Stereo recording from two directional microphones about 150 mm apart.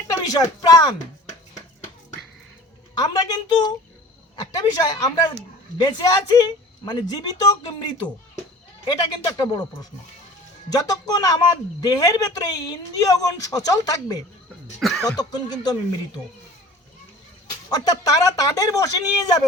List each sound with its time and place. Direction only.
0.2 s a man's voice: 25° left (ahead or behind)
2.9 s a man's voice: 25° left (ahead or behind)
10.7 s a man's voice: 25° left (ahead or behind)
14.8 s speech: centre (ahead or behind)
15.0 s a man's voice: 25° left (ahead or behind)
17.7 s a man's voice: 25° left (ahead or behind)